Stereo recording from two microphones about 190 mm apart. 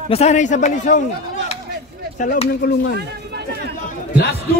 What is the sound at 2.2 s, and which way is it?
Speech, 40° left (ahead or behind).